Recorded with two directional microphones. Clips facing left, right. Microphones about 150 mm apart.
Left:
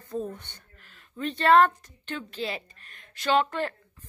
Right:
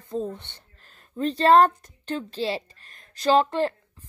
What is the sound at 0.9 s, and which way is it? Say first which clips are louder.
A woman's voice: right 6 dB; 40° right (ahead or behind).